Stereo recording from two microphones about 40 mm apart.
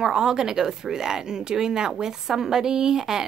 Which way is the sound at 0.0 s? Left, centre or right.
Centre.